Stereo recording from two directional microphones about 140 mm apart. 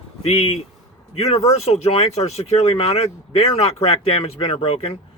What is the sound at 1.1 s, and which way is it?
Speech, 45° left (ahead or behind).